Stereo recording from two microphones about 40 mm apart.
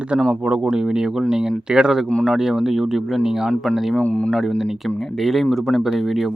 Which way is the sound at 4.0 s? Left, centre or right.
Left.